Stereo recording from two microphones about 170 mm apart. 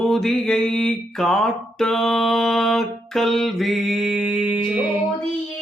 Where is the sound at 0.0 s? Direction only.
Centre (ahead or behind).